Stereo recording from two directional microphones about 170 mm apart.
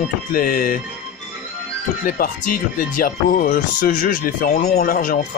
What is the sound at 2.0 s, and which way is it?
Music, 55° left (ahead or behind).